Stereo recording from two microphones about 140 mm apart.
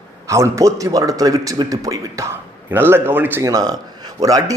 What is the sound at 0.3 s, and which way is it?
A man's voice, 20° right (ahead or behind).